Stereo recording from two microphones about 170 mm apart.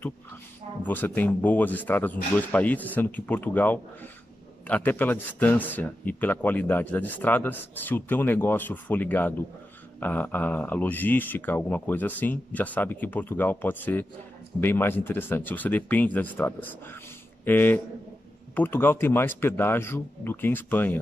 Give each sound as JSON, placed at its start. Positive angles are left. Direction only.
{"t": 0.8, "sound": "speech", "side_deg": 10}